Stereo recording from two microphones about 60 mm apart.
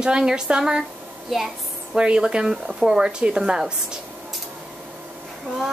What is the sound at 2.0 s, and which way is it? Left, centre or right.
Speech, centre.